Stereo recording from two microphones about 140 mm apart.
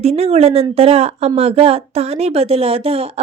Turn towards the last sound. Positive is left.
turn(degrees=-45)  # may be behind; listen again after turning